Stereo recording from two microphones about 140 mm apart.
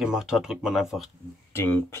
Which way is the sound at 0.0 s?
5° right (ahead or behind).